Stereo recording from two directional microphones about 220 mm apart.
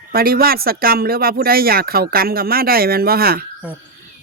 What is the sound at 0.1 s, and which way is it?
Speech, 45° right (ahead or behind).